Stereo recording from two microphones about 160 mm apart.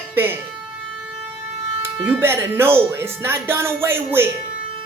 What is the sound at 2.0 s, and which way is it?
A woman's voice, 10° right (ahead or behind).